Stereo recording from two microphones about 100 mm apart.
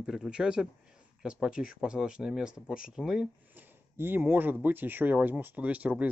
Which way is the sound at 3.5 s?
20° right (ahead or behind).